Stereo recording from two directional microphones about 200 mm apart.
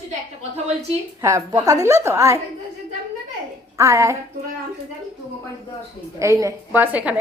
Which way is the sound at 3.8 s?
15° right (ahead or behind).